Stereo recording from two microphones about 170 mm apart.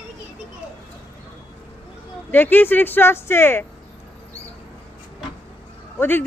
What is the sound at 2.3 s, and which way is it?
Speech, 10° left (ahead or behind).